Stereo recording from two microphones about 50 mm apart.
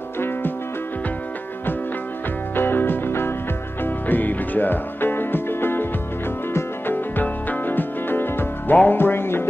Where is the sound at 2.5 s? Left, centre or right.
Left.